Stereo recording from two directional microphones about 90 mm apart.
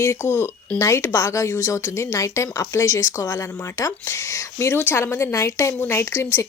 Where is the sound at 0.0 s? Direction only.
30° left (ahead or behind).